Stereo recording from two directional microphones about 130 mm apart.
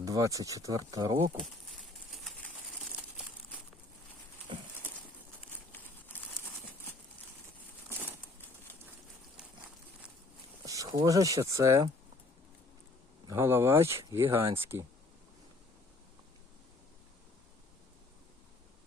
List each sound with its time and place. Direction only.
0.0 s speech: 25° right (ahead or behind)
7.9 s a sound: 15° right (ahead or behind)
10.7 s speech: 25° right (ahead or behind)
13.3 s speech: 20° right (ahead or behind)